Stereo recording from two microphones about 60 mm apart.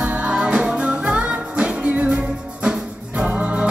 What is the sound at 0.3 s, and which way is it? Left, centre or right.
Music, centre.